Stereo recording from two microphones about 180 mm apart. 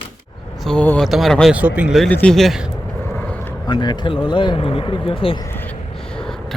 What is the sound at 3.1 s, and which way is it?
Vehicle, 5° left (ahead or behind).